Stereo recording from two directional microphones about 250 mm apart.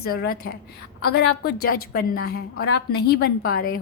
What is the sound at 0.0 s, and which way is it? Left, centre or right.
A woman's voice, left.